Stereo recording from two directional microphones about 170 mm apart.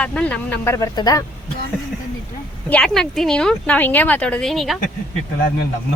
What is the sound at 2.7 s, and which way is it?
Speech, 5° left (ahead or behind).